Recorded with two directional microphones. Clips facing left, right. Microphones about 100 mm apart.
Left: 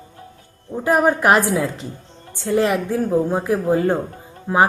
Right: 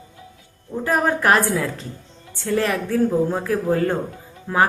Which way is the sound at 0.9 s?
15° left (ahead or behind).